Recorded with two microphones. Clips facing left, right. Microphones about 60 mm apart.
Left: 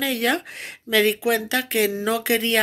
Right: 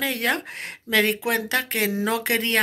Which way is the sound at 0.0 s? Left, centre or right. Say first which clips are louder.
Left 2 dB; right.